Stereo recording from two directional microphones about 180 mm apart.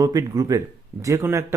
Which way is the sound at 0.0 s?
20° right (ahead or behind).